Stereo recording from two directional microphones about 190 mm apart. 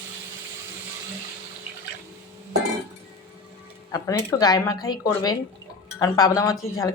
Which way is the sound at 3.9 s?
15° left (ahead or behind).